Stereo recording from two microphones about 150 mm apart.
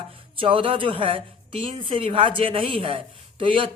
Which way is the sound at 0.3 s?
35° right (ahead or behind).